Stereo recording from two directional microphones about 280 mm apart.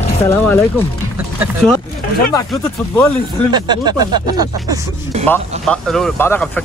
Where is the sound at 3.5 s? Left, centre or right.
Centre.